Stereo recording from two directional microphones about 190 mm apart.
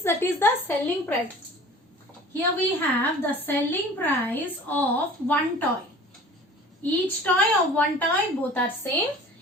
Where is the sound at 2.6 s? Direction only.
10° left (ahead or behind).